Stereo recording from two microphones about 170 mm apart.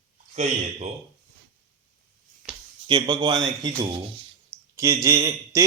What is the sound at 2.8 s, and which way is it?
Speech, 25° right (ahead or behind).